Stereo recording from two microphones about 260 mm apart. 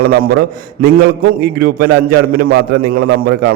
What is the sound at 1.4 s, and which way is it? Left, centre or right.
A man's voice, right.